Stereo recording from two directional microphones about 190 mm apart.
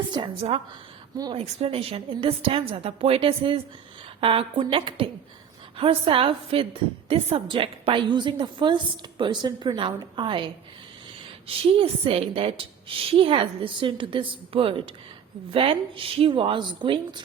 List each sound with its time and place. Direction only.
0.1 s a woman's voice: 30° right (ahead or behind)
1.4 s a woman's voice: 30° right (ahead or behind)